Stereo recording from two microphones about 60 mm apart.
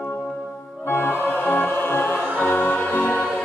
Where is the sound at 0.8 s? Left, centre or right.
Left.